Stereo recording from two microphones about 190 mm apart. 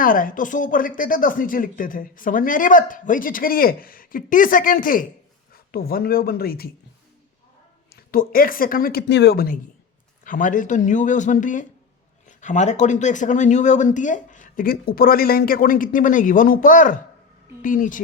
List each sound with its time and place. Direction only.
0.0 s speech: 45° left (ahead or behind)
7.9 s speech: 50° left (ahead or behind)